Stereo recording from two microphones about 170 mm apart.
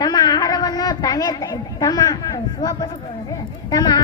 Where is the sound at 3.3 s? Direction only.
20° left (ahead or behind).